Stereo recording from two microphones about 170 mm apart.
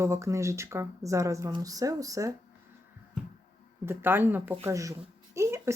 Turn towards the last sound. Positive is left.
turn(degrees=-15)  # may be behind; listen again after turning